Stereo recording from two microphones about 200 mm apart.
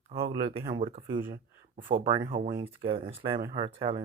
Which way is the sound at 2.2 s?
45° right (ahead or behind).